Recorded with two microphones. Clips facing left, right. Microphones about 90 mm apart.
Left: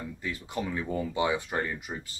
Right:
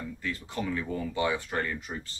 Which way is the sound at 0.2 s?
15° left (ahead or behind).